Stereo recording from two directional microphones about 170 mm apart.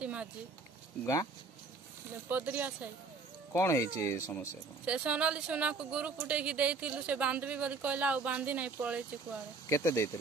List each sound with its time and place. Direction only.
0.0 s a sound: 5° right (ahead or behind)
2.2 s speech: 10° right (ahead or behind)
3.5 s speech: 15° left (ahead or behind)
4.8 s speech: 5° right (ahead or behind)
9.7 s speech: 15° left (ahead or behind)